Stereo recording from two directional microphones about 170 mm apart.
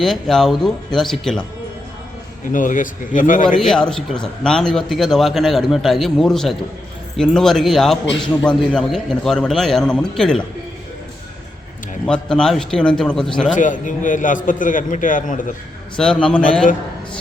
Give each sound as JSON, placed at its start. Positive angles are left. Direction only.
{"t": 0.0, "sound": "a man's voice", "side_deg": 0}
{"t": 2.5, "sound": "a man's voice", "side_deg": 50}
{"t": 3.6, "sound": "a man's voice", "side_deg": 5}
{"t": 12.0, "sound": "a man's voice", "side_deg": 5}
{"t": 13.6, "sound": "a man's voice", "side_deg": 50}
{"t": 16.0, "sound": "a man's voice", "side_deg": 5}